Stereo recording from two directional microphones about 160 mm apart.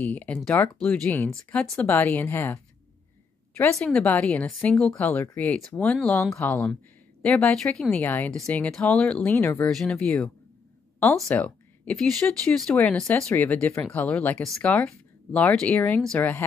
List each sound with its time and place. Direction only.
0.0 s speech: 10° left (ahead or behind)
3.7 s speech: 5° left (ahead or behind)